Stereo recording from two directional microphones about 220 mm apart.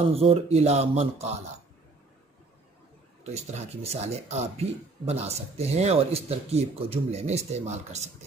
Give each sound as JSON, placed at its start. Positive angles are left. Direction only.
{"t": 0.1, "sound": "speech", "side_deg": -25}
{"t": 3.3, "sound": "speech", "side_deg": -30}